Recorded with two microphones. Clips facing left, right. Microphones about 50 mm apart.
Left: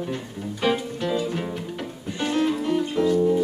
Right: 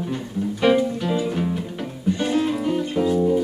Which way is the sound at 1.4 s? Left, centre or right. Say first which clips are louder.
Right 4 dB; centre.